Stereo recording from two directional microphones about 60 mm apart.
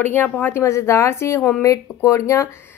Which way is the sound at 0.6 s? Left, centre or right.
Left.